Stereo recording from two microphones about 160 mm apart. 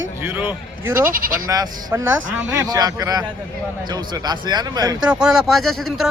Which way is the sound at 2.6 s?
25° right (ahead or behind).